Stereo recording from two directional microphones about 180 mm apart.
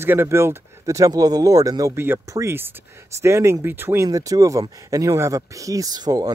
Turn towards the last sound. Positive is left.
turn(degrees=-20)  # may be behind; listen again after turning